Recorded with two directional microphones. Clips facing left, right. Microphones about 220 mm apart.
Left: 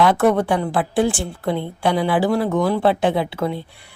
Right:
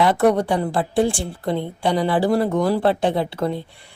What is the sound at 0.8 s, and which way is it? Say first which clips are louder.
Speech: even; 25° right (ahead or behind).